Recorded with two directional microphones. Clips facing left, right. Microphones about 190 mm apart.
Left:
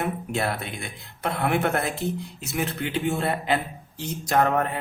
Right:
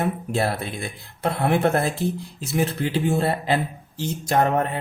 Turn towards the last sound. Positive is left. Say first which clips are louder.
# right 2 dB
turn(degrees=-20)  # may be behind; listen again after turning